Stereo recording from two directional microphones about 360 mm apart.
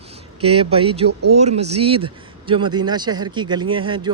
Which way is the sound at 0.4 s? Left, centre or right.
Centre.